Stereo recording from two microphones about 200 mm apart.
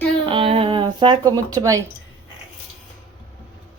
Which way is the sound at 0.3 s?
25° right (ahead or behind).